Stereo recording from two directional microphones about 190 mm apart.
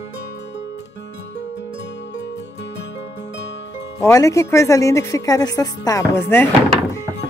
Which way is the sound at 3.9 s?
15° left (ahead or behind).